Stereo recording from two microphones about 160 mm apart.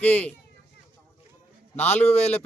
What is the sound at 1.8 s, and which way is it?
Speech, 10° left (ahead or behind).